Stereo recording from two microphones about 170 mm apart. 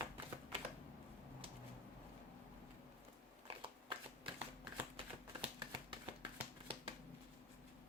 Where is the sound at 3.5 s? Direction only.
30° right (ahead or behind).